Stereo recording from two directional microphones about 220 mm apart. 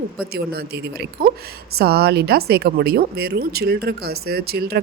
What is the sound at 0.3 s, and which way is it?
Speech, 45° right (ahead or behind).